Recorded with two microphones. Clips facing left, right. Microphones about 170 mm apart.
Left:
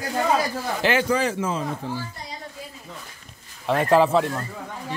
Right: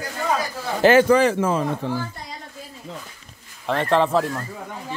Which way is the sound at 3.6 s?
5° left (ahead or behind).